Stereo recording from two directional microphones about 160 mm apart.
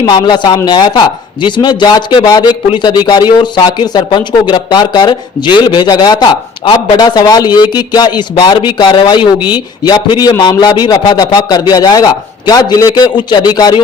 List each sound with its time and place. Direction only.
0.0 s a man's voice: 25° left (ahead or behind)